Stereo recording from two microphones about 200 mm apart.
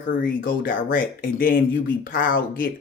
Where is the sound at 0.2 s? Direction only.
45° left (ahead or behind).